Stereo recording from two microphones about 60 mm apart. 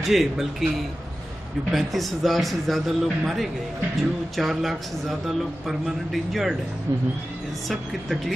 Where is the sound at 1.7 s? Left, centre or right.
Centre.